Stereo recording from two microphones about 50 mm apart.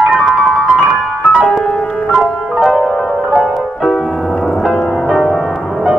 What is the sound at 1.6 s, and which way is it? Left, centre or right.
Music, centre.